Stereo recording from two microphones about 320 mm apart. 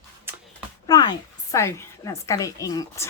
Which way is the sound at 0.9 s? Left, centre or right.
Centre.